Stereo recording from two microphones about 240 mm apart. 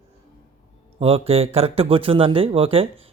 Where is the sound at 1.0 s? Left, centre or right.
Right.